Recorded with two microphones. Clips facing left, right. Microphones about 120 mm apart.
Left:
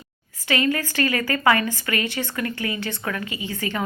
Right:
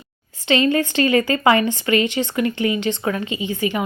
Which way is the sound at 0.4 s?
25° right (ahead or behind).